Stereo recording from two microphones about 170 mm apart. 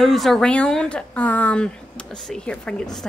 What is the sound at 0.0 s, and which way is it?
A woman's voice, centre (ahead or behind).